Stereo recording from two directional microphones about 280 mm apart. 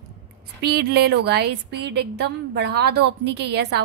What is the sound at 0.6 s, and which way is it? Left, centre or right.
A woman's voice, right.